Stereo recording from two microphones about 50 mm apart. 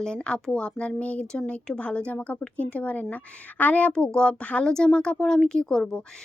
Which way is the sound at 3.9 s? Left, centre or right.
Centre.